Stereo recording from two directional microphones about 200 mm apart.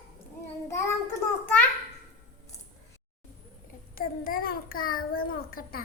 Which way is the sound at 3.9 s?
45° left (ahead or behind).